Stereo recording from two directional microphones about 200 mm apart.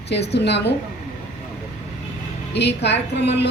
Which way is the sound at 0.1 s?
60° left (ahead or behind).